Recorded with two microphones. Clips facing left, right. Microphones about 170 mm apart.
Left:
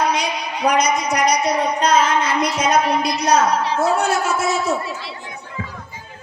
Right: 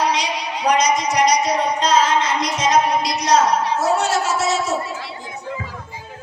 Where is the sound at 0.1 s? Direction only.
55° left (ahead or behind).